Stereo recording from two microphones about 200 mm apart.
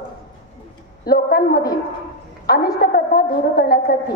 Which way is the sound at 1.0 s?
50° left (ahead or behind).